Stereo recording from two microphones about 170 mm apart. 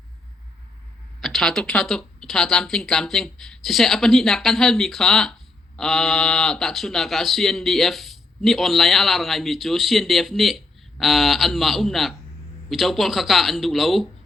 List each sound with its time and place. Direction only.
1.2 s speech: centre (ahead or behind)